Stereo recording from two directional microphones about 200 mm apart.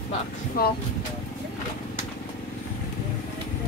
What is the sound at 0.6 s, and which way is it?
Speech, 45° left (ahead or behind).